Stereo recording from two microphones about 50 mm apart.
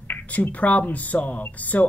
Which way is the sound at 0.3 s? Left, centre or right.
Left.